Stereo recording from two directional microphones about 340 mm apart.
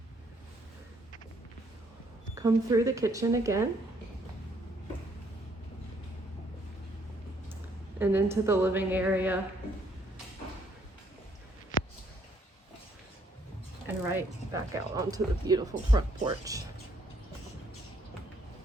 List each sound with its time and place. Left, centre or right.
2.3 s speech: centre
7.9 s a woman's voice: centre
11.7 s a sound: left
14.1 s speech: centre